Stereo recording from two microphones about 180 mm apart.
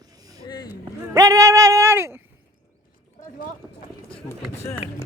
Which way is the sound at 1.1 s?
20° right (ahead or behind).